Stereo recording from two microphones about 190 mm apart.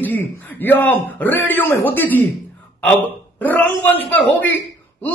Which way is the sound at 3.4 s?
10° left (ahead or behind).